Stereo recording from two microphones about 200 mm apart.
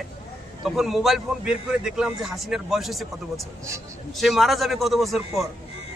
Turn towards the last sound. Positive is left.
turn(degrees=0)  # may be behind; listen again after turning